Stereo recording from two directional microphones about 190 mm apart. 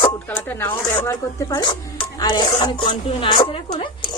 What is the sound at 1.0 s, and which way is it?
Speech, 20° left (ahead or behind).